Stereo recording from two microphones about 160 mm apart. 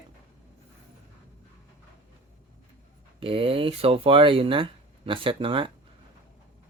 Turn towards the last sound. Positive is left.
turn(degrees=-30)  # may be behind; listen again after turning